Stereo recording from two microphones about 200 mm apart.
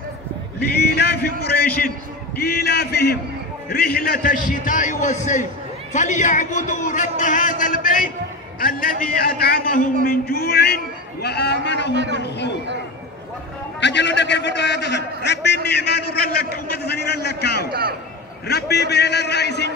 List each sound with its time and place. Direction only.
0.7 s a man's voice: 55° left (ahead or behind)
2.3 s a man's voice: 50° left (ahead or behind)
11.9 s a man's voice: 60° right (ahead or behind)
12.2 s a man's voice: 60° left (ahead or behind)
13.7 s a man's voice: 60° left (ahead or behind)